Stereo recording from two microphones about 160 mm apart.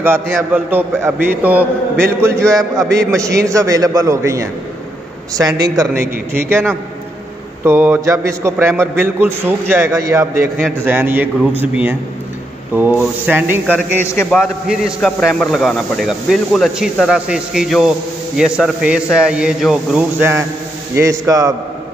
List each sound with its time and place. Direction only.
0.0 s a man's voice: 15° right (ahead or behind)
6.3 s a man's voice: 15° right (ahead or behind)
13.9 s a man's voice: 15° left (ahead or behind)
14.4 s a man's voice: 5° right (ahead or behind); by 21.5 s 20° right (ahead or behind)